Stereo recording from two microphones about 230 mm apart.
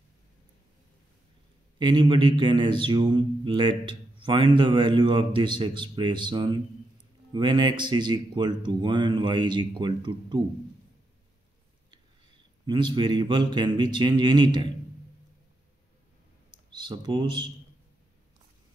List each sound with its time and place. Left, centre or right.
1.8 s speech: centre
12.6 s speech: right
16.4 s speech: centre